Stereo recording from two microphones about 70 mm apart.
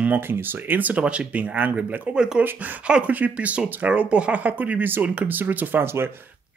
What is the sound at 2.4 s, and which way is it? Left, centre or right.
Speech, right.